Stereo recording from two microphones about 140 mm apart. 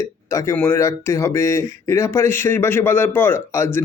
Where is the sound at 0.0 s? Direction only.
20° left (ahead or behind).